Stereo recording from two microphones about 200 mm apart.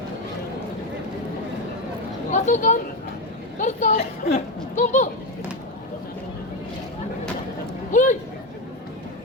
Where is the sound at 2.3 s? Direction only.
35° left (ahead or behind).